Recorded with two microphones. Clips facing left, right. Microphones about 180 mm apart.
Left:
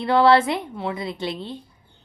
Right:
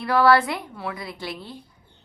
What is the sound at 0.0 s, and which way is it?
A woman's voice, 25° left (ahead or behind).